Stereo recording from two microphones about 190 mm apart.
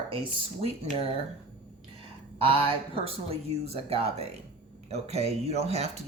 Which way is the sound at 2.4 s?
30° right (ahead or behind).